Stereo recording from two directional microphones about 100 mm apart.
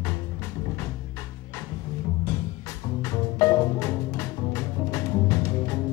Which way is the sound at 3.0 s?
40° left (ahead or behind).